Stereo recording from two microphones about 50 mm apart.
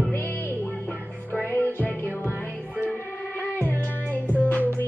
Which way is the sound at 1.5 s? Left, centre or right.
Left.